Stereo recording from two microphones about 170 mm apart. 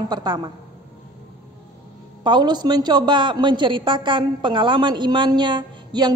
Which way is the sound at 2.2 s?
25° right (ahead or behind).